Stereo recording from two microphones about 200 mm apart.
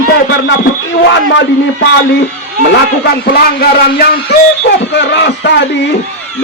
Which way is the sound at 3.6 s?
50° left (ahead or behind).